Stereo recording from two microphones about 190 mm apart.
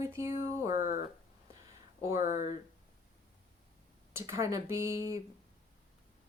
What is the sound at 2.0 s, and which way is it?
Speech, 15° right (ahead or behind).